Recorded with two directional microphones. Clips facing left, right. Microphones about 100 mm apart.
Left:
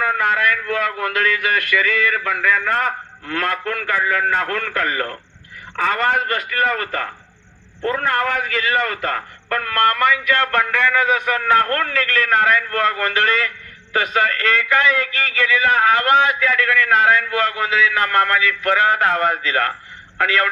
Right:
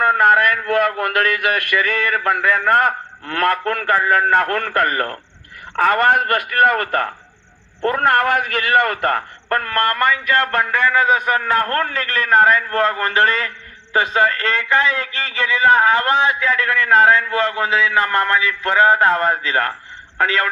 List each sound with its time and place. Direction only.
0.0 s a man's voice: 55° right (ahead or behind)
10.9 s a man's voice: 30° right (ahead or behind)